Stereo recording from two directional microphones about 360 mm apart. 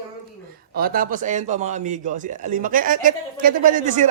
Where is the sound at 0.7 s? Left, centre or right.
Right.